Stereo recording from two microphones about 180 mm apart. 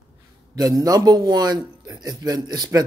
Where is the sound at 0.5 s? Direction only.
20° right (ahead or behind).